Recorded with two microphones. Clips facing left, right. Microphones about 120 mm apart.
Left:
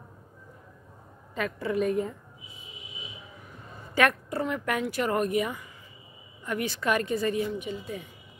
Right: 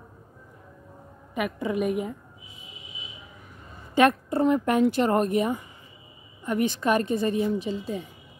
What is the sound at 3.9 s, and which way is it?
A woman's voice, 25° right (ahead or behind).